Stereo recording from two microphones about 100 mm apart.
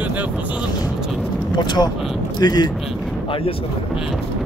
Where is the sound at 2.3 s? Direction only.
45° left (ahead or behind).